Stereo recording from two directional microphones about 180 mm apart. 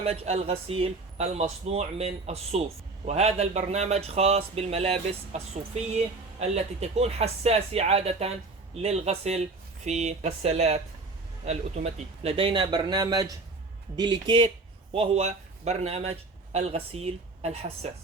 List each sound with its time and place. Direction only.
0.0 s speech: 35° right (ahead or behind)